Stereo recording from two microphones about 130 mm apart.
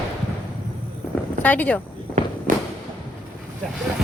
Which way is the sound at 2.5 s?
90° right.